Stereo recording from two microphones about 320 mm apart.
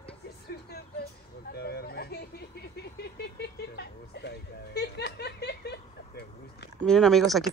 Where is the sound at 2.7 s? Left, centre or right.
Left.